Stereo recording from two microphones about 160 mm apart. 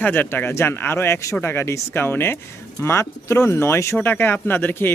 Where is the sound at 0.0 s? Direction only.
10° left (ahead or behind).